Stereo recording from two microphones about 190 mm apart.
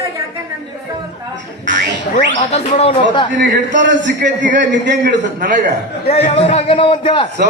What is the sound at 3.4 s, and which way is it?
A man's voice, 65° right (ahead or behind).